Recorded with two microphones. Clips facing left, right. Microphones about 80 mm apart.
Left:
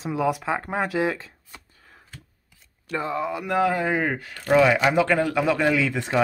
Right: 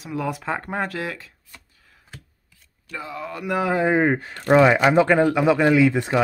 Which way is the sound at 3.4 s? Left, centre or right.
Centre.